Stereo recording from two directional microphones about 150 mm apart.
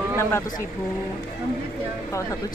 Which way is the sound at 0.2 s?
15° left (ahead or behind).